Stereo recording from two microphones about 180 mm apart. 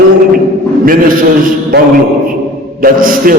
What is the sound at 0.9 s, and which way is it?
Speech, 50° right (ahead or behind).